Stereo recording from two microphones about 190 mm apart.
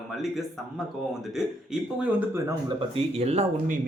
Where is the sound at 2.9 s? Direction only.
35° right (ahead or behind).